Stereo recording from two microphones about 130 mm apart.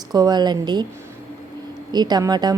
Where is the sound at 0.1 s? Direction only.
30° right (ahead or behind).